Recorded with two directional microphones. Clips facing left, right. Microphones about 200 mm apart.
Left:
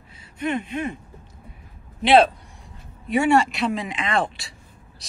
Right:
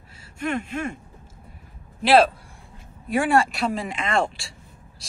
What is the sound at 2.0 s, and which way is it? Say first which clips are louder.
Speech: left 1 dB; centre (ahead or behind).